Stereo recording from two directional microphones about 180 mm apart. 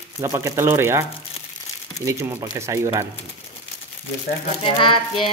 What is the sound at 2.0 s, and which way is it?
Speech, 15° right (ahead or behind).